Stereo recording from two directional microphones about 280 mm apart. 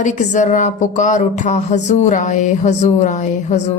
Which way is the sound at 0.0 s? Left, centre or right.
Left.